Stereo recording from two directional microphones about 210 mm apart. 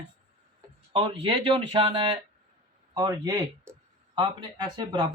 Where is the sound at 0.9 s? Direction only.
25° right (ahead or behind).